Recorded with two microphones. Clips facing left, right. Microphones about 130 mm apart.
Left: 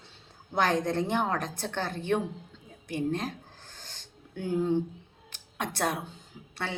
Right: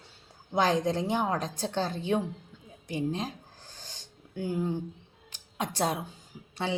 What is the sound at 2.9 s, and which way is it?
Speech, 15° right (ahead or behind).